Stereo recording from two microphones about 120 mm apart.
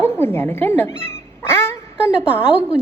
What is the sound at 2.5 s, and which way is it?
Speech, 10° right (ahead or behind).